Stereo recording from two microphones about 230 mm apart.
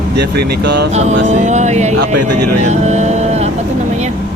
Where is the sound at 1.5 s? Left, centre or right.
Right.